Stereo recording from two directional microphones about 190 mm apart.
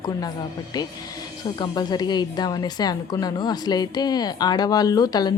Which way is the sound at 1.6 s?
20° left (ahead or behind).